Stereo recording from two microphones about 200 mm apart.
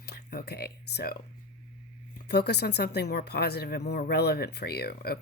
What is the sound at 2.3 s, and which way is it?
Speech, 55° left (ahead or behind).